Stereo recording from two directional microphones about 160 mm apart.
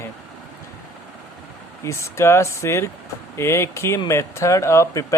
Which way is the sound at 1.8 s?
15° left (ahead or behind).